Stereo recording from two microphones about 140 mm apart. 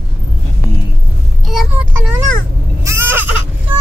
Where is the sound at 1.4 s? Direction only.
5° right (ahead or behind).